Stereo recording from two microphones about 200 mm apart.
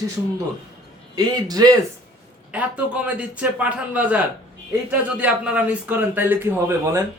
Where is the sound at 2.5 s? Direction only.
5° right (ahead or behind).